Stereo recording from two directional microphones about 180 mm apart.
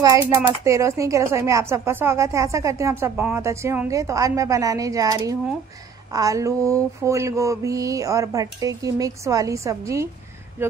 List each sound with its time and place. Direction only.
0.0 s speech: 15° right (ahead or behind)